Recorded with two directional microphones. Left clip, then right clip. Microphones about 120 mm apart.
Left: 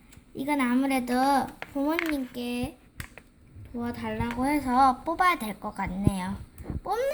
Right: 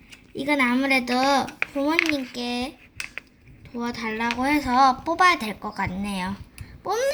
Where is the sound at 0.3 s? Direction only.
Centre (ahead or behind).